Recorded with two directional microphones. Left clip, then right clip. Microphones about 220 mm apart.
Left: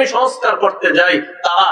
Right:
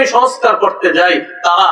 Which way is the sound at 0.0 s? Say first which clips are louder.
Right 4 dB; 50° left (ahead or behind).